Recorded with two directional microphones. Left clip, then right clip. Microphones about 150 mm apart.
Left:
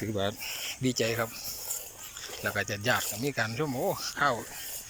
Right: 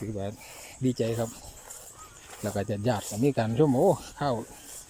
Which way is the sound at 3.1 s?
55° right (ahead or behind).